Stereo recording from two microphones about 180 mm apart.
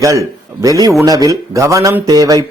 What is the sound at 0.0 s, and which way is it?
A man's voice, 20° right (ahead or behind).